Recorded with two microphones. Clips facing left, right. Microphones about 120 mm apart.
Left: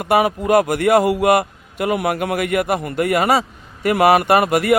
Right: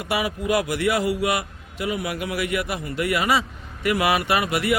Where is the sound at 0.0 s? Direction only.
50° left (ahead or behind).